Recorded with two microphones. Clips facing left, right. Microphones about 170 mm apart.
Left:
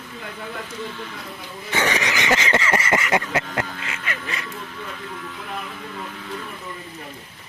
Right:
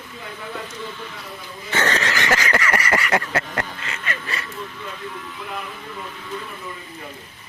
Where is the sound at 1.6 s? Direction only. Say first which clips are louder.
Even; 15° left (ahead or behind).